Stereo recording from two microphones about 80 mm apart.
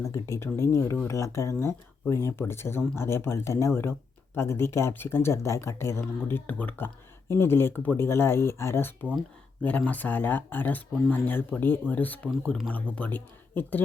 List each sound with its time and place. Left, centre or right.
0.0 s speech: left
9.6 s speech: centre